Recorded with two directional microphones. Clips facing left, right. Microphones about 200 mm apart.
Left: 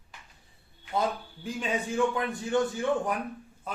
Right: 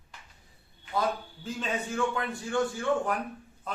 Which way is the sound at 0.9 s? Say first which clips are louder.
Left 1 dB; 25° left (ahead or behind).